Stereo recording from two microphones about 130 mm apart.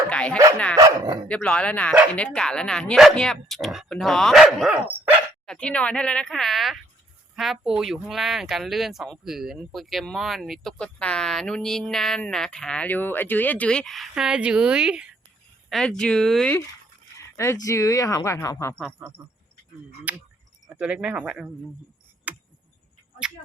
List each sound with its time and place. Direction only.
0.1 s dog: 10° left (ahead or behind)
0.8 s speech: 30° right (ahead or behind)
1.3 s speech: 10° left (ahead or behind)
15.7 s speech: 5° left (ahead or behind)
17.2 s speech: 20° left (ahead or behind)
18.9 s speech: 15° right (ahead or behind)
22.3 s cricket: 10° right (ahead or behind)